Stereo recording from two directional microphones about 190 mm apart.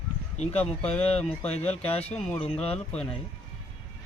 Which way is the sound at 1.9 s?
30° left (ahead or behind).